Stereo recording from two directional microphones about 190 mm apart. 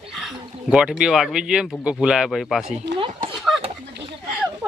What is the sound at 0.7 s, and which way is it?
Speech, 5° right (ahead or behind).